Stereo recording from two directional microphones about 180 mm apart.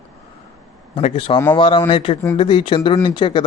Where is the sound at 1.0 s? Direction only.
30° left (ahead or behind).